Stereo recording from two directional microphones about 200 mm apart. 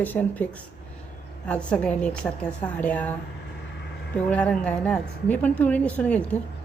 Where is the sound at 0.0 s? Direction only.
10° left (ahead or behind).